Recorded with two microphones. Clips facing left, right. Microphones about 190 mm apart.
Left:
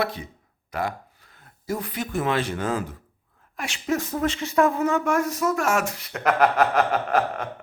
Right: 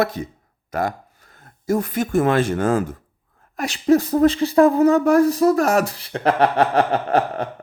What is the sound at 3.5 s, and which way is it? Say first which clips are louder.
Speech: right 10 dB; 35° right (ahead or behind).